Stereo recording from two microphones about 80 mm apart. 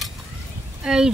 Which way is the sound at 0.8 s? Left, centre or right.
Centre.